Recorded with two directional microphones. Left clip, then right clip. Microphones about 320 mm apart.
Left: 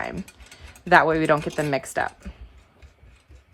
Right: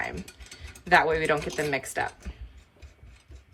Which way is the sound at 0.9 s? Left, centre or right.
Centre.